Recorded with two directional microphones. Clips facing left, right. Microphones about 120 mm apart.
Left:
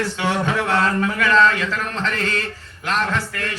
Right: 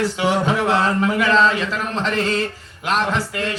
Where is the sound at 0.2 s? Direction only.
20° right (ahead or behind).